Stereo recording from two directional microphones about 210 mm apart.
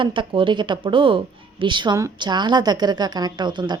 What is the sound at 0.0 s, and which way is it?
A woman's voice, 25° right (ahead or behind).